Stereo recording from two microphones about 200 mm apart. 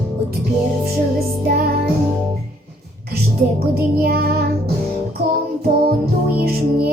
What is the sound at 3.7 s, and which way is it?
Music, 50° right (ahead or behind).